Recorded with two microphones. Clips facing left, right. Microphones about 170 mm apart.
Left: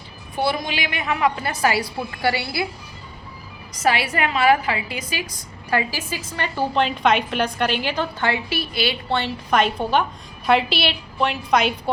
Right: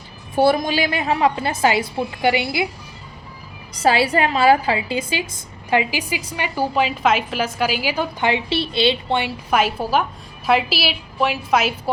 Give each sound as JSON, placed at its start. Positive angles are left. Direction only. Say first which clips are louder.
{"t": 0.3, "sound": "a woman's voice", "louder": "right 7 dB", "side_deg": -45}
{"t": 3.8, "sound": "a woman's voice", "louder": "right 4 dB", "side_deg": -30}
{"t": 5.7, "sound": "a woman's voice", "louder": "right 3 dB", "side_deg": -15}